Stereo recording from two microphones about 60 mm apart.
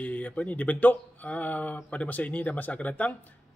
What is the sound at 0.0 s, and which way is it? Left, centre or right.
Speech, left.